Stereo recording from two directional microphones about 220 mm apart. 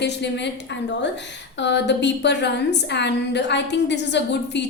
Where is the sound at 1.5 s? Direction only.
55° left (ahead or behind).